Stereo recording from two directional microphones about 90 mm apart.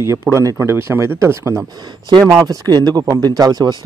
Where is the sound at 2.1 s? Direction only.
45° right (ahead or behind).